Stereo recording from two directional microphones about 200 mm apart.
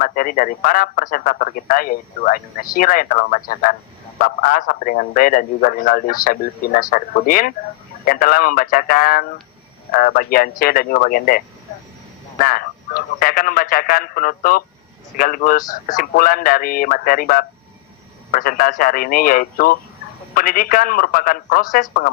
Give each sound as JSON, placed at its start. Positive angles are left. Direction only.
{"t": 0.0, "sound": "speech", "side_deg": 45}